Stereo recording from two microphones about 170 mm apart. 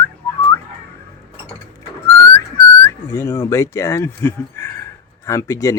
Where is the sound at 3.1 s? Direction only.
15° left (ahead or behind).